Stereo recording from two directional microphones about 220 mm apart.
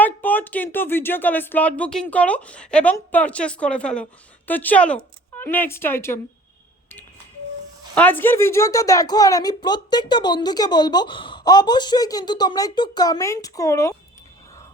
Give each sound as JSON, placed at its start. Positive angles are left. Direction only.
{"t": 0.0, "sound": "a woman's voice", "side_deg": 10}
{"t": 7.9, "sound": "a woman's voice", "side_deg": 10}